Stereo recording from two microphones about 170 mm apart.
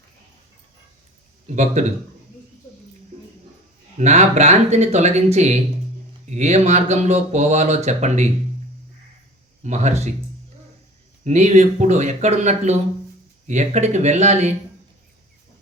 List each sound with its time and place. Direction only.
1.5 s speech: 45° right (ahead or behind)
3.9 s speech: 40° right (ahead or behind)
9.6 s speech: 40° right (ahead or behind)
11.2 s speech: 40° right (ahead or behind)